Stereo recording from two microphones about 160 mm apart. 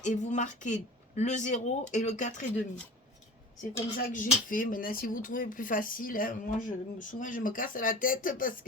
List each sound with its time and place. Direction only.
0.0 s speech: 50° left (ahead or behind)
3.9 s speech: 60° left (ahead or behind)